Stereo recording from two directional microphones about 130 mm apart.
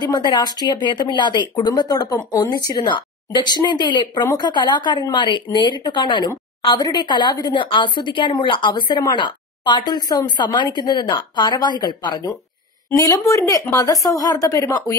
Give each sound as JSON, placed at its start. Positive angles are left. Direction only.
{"t": 0.0, "sound": "a woman's voice", "side_deg": 30}